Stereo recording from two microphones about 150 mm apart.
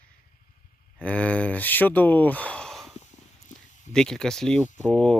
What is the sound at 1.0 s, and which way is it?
Speech, 10° left (ahead or behind).